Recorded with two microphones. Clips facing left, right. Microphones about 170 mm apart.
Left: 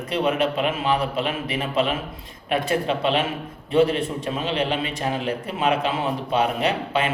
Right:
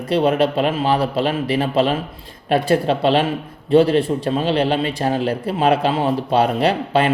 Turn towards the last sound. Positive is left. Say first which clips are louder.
# right 6 dB
turn(degrees=-35)  # may be behind; listen again after turning